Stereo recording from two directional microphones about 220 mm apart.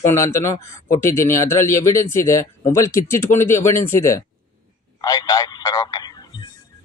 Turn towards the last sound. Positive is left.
turn(degrees=20)  # may be behind; listen again after turning